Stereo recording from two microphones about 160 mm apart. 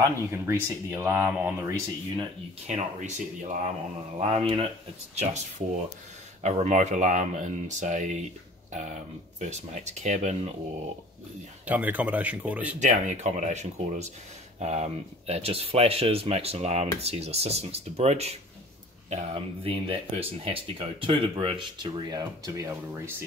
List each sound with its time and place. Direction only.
0.0 s speech: 15° right (ahead or behind)
2.6 s speech: 45° right (ahead or behind)
4.2 s speech: 35° right (ahead or behind)
5.1 s speech: 45° right (ahead or behind)
6.4 s speech: 45° right (ahead or behind)
11.6 s speech: 10° right (ahead or behind)
12.7 s speech: 50° right (ahead or behind); by 23.1 s 15° right (ahead or behind)